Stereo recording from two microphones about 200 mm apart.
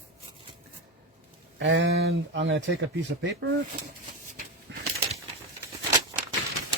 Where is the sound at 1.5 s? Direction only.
65° right (ahead or behind).